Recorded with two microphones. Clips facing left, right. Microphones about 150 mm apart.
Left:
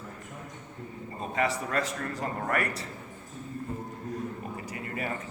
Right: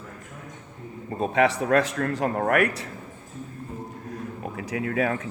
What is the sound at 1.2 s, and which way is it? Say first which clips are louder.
A man's voice: right 8 dB; 70° right (ahead or behind).